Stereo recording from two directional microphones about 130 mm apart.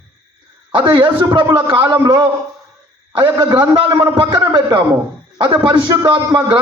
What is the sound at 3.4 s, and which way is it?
A man's voice, 35° right (ahead or behind).